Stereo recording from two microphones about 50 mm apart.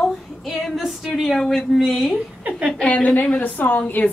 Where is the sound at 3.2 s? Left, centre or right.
Left.